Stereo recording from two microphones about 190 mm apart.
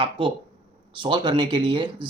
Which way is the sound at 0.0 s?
25° right (ahead or behind).